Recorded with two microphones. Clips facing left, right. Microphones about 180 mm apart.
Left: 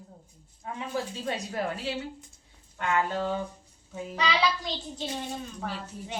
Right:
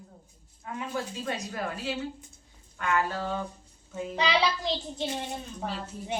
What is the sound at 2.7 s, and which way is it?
Speech, 20° left (ahead or behind).